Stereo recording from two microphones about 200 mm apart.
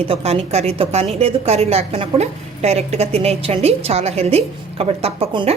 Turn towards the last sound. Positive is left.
turn(degrees=-30)  # may be behind; listen again after turning